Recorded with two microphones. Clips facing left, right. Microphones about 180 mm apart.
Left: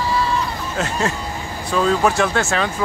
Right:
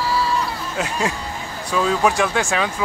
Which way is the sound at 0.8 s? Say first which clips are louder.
Left 1 dB; 10° right (ahead or behind).